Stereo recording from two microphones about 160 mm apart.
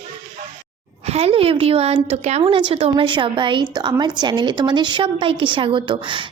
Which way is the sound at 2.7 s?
35° right (ahead or behind).